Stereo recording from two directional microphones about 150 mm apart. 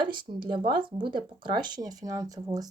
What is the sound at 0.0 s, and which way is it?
Speech, 30° right (ahead or behind).